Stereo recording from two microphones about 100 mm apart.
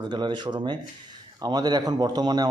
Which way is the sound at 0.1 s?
50° right (ahead or behind).